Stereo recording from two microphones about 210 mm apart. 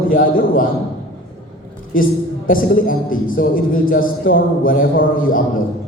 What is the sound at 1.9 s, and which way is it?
Speech, 40° left (ahead or behind).